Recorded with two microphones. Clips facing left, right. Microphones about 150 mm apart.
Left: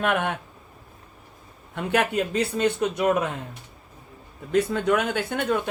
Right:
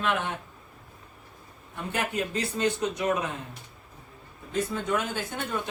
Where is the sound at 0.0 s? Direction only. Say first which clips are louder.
Left 4 dB; 55° left (ahead or behind).